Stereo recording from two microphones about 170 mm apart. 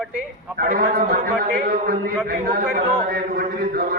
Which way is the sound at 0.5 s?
60° right (ahead or behind).